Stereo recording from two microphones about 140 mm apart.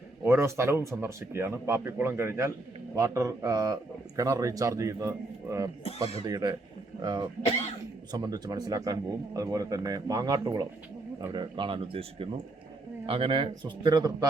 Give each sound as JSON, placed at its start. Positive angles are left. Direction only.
{"t": 0.3, "sound": "a man's voice", "side_deg": -20}
{"t": 11.3, "sound": "a man's voice", "side_deg": -35}